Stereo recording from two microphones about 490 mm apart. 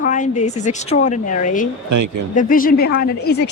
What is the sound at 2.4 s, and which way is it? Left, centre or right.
A woman's voice, centre.